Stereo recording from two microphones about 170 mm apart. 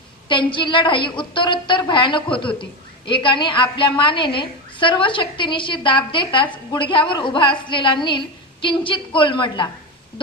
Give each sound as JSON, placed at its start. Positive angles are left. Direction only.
{"t": 0.3, "sound": "a woman's voice", "side_deg": 30}